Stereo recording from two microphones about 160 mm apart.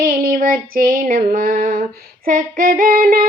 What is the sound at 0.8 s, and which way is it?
Singing, 60° right (ahead or behind).